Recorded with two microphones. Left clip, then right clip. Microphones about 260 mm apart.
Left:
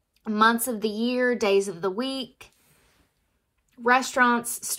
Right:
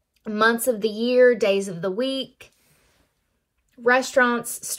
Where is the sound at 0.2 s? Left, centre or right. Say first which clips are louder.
Right 1 dB; centre.